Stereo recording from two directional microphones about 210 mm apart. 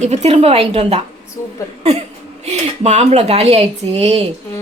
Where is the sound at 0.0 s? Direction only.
30° right (ahead or behind).